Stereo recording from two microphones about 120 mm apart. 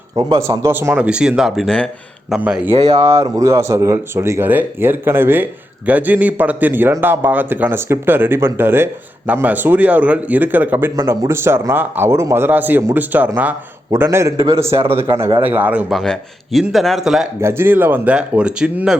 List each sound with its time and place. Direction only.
0.2 s speech: 30° right (ahead or behind); by 1.9 s 5° left (ahead or behind)
2.3 s speech: 10° right (ahead or behind)
2.7 s speech: 55° right (ahead or behind)
3.0 s speech: 25° right (ahead or behind)
15.9 s speech: centre (ahead or behind)
17.4 s speech: 20° right (ahead or behind)